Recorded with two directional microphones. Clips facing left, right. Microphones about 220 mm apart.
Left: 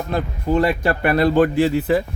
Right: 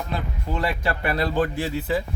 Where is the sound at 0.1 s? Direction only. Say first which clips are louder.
Left 13 dB; 50° left (ahead or behind).